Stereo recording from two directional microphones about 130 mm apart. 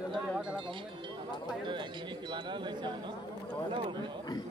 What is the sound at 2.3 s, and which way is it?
Speech, 35° right (ahead or behind).